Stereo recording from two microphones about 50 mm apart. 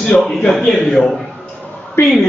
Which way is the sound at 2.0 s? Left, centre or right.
Left.